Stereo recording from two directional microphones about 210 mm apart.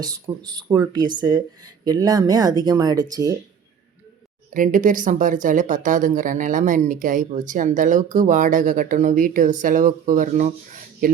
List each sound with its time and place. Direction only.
0.0 s speech: 20° right (ahead or behind)
4.5 s speech: 40° right (ahead or behind)